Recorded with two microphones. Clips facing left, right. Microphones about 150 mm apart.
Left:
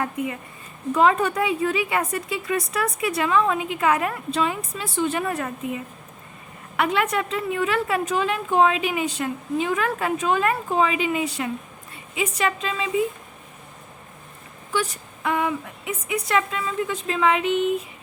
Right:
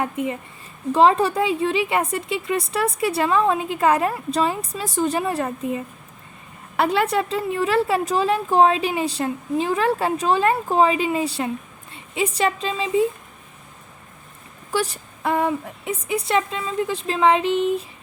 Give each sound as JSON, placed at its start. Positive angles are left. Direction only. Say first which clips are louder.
{"t": 0.0, "sound": "a woman's voice", "louder": "right 2 dB", "side_deg": -25}
{"t": 14.7, "sound": "a woman's voice", "louder": "right 2 dB", "side_deg": -35}